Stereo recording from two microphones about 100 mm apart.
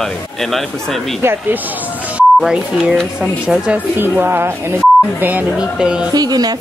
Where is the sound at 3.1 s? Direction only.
10° right (ahead or behind).